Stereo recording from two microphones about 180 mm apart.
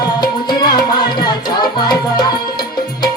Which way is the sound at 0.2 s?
25° left (ahead or behind).